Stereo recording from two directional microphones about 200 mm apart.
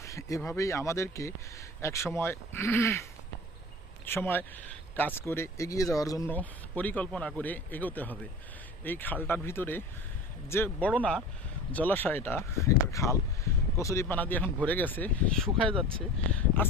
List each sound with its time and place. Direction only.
0.0 s speech: 15° left (ahead or behind)
4.0 s speech: 10° left (ahead or behind)
15.6 s speech: 25° right (ahead or behind)